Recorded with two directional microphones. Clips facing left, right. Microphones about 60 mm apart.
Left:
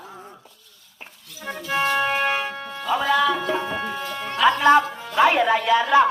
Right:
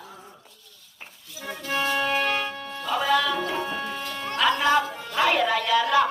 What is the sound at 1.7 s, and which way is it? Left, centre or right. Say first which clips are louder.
Music: left 3 dB; left.